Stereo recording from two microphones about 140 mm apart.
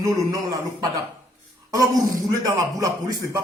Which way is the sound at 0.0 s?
25° right (ahead or behind).